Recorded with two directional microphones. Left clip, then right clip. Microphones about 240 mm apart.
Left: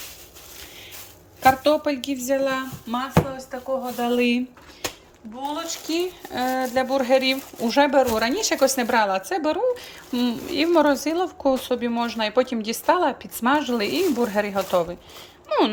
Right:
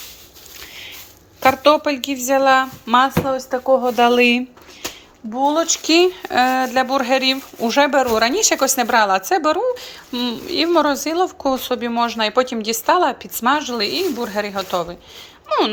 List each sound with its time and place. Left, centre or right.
1.4 s a woman's voice: centre
3.3 s speech: right
4.0 s a woman's voice: centre
5.5 s speech: centre
5.8 s speech: centre